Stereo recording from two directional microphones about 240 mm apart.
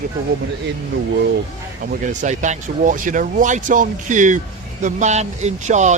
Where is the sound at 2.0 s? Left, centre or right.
Right.